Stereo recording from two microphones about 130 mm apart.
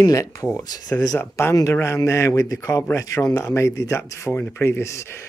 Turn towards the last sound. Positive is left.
turn(degrees=20)  # may be behind; listen again after turning